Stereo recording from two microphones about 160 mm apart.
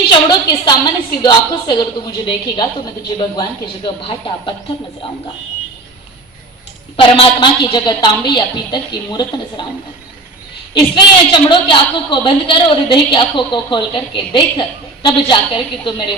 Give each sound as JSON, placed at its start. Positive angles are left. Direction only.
{"t": 0.1, "sound": "a woman's voice", "side_deg": 30}
{"t": 3.8, "sound": "a woman's voice", "side_deg": 30}
{"t": 6.9, "sound": "a woman's voice", "side_deg": 35}
{"t": 10.8, "sound": "a woman's voice", "side_deg": 30}